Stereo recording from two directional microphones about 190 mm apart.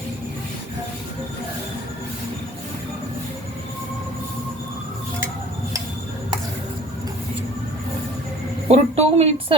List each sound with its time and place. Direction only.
8.7 s a woman's voice: 35° right (ahead or behind)